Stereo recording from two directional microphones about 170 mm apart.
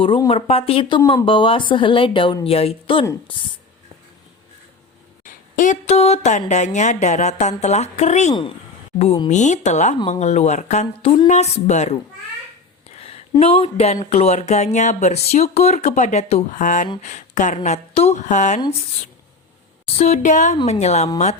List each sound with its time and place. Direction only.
0.3 s speech: 35° left (ahead or behind)
5.2 s a woman's voice: 50° left (ahead or behind)
8.3 s speech: 30° left (ahead or behind)
9.3 s a woman's voice: 45° left (ahead or behind)
13.0 s a sound: 35° left (ahead or behind)
13.4 s a woman's voice: 35° left (ahead or behind)
19.8 s a woman's voice: 40° left (ahead or behind)